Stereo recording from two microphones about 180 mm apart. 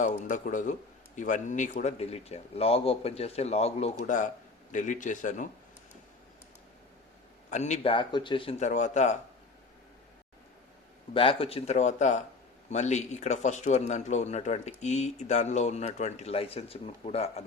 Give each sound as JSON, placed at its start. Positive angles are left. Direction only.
{"t": 0.0, "sound": "a man's voice", "side_deg": 45}
{"t": 7.5, "sound": "speech", "side_deg": 40}
{"t": 7.9, "sound": "speech", "side_deg": 25}
{"t": 11.1, "sound": "speech", "side_deg": 30}